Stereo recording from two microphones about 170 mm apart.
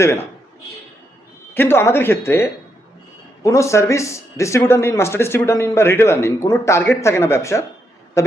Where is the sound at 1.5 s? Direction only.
15° left (ahead or behind).